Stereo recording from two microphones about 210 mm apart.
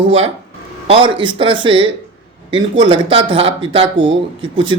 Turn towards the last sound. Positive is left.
turn(degrees=-25)  # may be behind; listen again after turning